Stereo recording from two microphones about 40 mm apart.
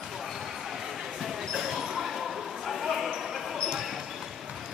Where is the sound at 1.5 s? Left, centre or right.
Centre.